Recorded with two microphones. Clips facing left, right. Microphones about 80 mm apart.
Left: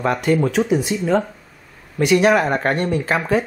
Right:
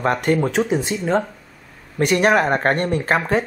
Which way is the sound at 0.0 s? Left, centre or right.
Right.